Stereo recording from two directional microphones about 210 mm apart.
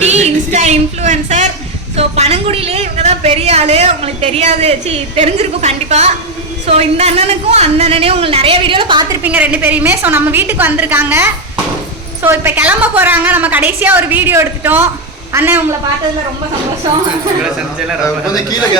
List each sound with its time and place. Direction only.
0.0 s a sound: 30° right (ahead or behind)
2.0 s a woman's voice: 30° right (ahead or behind)
9.2 s a woman's voice: 5° right (ahead or behind)